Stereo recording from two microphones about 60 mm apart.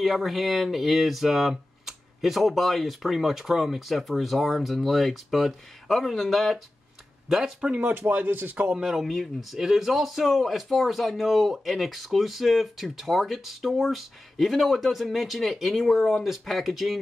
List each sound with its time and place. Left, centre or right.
0.0 s a man's voice: centre
7.8 s speech: right
8.7 s a man's voice: centre